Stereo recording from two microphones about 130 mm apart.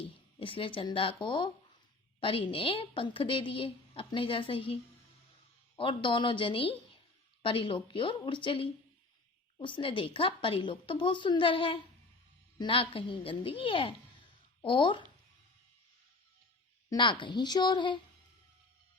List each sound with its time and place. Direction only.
0.0 s a woman's voice: 45° left (ahead or behind)
16.9 s a woman's voice: 35° left (ahead or behind)